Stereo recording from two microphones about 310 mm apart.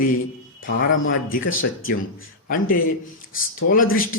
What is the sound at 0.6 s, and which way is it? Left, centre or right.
Speech, left.